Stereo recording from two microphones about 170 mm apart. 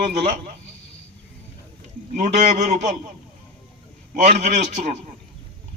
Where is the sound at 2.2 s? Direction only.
45° right (ahead or behind).